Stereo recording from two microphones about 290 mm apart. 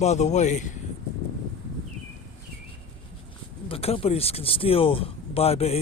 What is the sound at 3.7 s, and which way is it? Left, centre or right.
Speech, centre.